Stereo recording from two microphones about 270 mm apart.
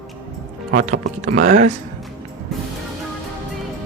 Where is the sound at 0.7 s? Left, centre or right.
Right.